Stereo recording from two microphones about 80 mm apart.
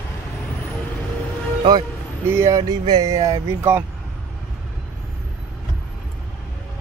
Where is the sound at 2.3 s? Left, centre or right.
Right.